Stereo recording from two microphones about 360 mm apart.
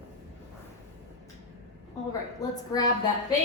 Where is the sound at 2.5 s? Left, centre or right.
Centre.